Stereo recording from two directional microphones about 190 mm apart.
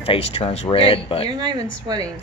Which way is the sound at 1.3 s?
20° right (ahead or behind).